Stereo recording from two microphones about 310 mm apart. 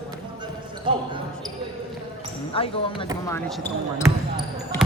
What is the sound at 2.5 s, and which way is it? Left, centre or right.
Speech, centre.